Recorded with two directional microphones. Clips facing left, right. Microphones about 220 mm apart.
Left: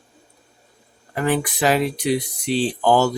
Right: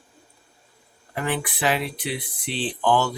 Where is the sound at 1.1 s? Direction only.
45° left (ahead or behind).